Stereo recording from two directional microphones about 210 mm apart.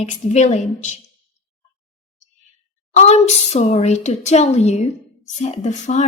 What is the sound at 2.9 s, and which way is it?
Female singing, 30° left (ahead or behind).